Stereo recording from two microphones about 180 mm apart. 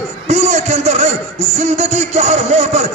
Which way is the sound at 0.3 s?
40° right (ahead or behind).